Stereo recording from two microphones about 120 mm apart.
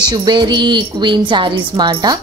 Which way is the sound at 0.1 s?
35° right (ahead or behind).